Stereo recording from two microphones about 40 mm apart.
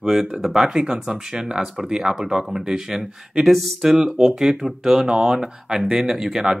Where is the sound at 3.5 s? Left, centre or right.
Centre.